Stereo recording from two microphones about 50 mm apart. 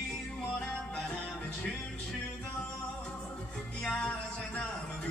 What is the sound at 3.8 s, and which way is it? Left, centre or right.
Music, centre.